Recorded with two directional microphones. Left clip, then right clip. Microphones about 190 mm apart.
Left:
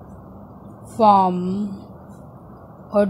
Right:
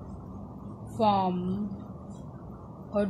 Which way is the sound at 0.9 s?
35° left (ahead or behind).